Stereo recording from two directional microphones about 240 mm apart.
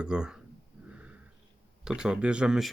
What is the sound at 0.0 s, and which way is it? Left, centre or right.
Speech, centre.